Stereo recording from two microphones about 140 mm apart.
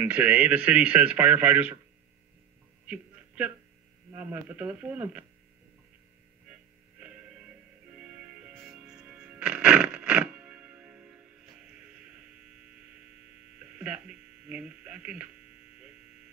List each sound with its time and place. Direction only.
0.0 s speech: 10° right (ahead or behind)
2.9 s a sound: 10° right (ahead or behind)
4.1 s speech: 10° right (ahead or behind)
6.5 s music: 10° right (ahead or behind)
13.7 s speech: 10° right (ahead or behind)